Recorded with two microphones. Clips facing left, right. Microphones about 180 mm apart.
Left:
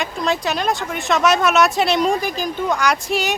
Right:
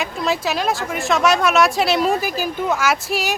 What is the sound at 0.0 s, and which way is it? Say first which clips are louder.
Speech: even; centre (ahead or behind).